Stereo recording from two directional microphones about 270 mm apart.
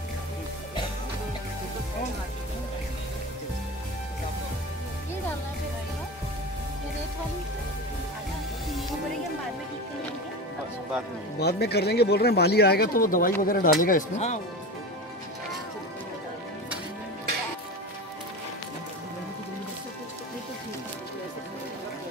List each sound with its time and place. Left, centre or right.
11.3 s speech: left